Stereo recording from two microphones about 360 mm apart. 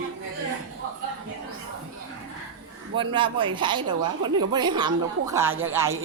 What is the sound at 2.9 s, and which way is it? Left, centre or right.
A woman's voice, centre.